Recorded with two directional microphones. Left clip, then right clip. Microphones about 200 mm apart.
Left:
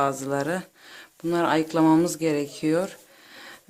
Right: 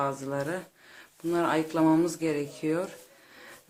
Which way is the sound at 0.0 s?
50° left (ahead or behind).